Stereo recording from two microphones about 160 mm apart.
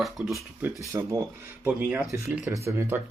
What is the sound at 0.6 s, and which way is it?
Speech, 20° right (ahead or behind).